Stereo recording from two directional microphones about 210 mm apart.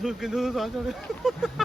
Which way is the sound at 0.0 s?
Centre (ahead or behind).